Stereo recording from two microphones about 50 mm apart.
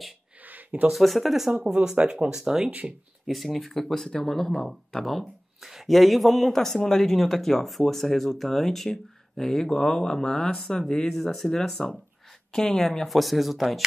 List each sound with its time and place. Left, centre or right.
0.5 s a sound: right
0.9 s speech: centre
1.5 s speech: right
2.2 s speech: centre
3.3 s speech: centre